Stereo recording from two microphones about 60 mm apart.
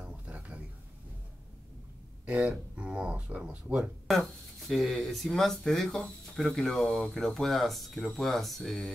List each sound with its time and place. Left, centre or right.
0.0 s a sound: right
2.2 s speech: centre
4.1 s speech: centre